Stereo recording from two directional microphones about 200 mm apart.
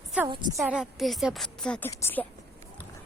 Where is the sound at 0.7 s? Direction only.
Centre (ahead or behind).